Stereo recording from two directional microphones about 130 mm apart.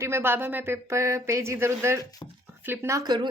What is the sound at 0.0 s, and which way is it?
Speech, 20° right (ahead or behind).